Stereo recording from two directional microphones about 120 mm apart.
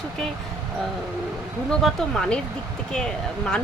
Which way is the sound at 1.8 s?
5° left (ahead or behind).